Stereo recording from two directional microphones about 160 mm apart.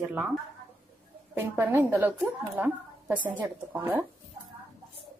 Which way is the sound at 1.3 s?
15° right (ahead or behind).